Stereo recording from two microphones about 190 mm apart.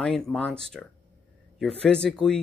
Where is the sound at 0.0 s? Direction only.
5° left (ahead or behind).